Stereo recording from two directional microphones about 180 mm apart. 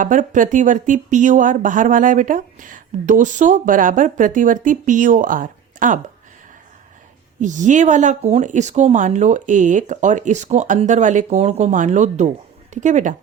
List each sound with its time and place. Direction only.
0.0 s speech: 45° right (ahead or behind)
7.3 s speech: 45° right (ahead or behind)